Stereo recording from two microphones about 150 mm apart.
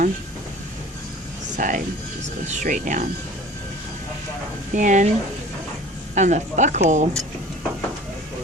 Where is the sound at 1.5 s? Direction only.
60° right (ahead or behind).